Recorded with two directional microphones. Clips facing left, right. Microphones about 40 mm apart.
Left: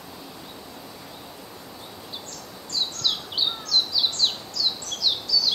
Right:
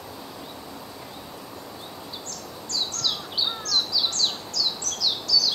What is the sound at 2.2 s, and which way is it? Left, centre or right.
Bird, left.